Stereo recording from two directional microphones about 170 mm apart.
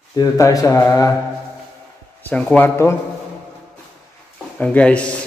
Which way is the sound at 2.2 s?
10° left (ahead or behind).